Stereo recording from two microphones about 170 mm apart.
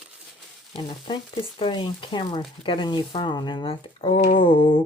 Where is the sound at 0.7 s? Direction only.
30° left (ahead or behind).